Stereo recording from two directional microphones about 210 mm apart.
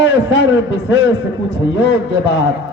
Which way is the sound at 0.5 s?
60° left (ahead or behind).